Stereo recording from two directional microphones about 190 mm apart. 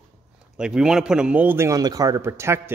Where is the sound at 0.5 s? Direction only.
5° right (ahead or behind).